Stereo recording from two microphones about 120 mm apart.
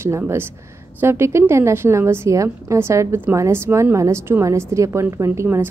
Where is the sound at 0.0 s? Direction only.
20° right (ahead or behind).